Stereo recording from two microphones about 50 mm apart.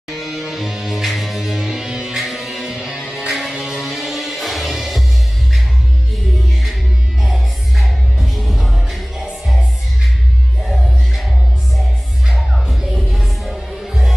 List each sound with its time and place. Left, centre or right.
0.1 s music: centre
7.2 s music: centre
10.7 s music: centre
12.6 s music: centre
13.8 s music: centre